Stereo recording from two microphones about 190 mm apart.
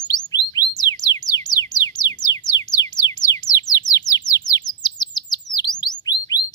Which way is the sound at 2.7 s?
20° left (ahead or behind).